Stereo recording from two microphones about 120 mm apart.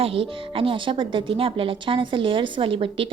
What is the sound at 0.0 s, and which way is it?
Speech, 50° right (ahead or behind).